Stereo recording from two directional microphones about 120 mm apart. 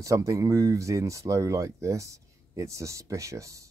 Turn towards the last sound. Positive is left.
turn(degrees=-25)  # may be behind; listen again after turning